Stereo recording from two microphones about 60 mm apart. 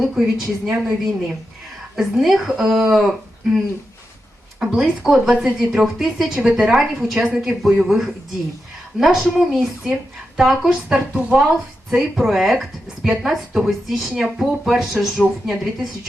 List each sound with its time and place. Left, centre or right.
0.0 s speech: centre
2.0 s speech: centre
4.6 s speech: centre
6.3 s speech: centre
11.9 s speech: centre